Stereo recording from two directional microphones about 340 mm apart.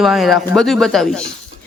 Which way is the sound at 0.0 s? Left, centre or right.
Centre.